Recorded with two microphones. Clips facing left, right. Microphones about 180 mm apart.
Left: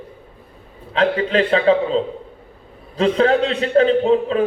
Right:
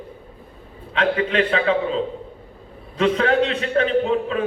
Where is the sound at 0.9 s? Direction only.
30° left (ahead or behind).